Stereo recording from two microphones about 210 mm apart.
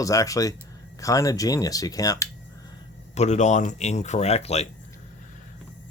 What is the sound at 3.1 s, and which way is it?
Speech, 30° left (ahead or behind).